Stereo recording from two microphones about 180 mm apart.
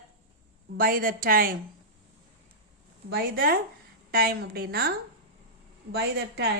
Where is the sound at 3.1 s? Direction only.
55° right (ahead or behind).